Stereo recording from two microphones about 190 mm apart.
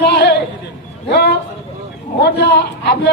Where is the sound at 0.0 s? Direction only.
60° left (ahead or behind).